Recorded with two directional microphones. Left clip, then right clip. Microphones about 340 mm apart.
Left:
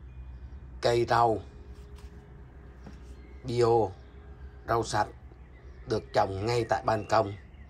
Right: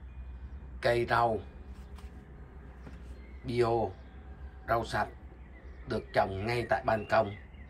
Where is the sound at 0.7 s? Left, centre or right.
Centre.